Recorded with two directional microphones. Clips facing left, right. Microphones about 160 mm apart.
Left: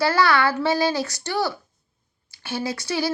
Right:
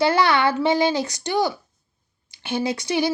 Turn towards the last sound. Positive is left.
turn(degrees=-20)  # may be behind; listen again after turning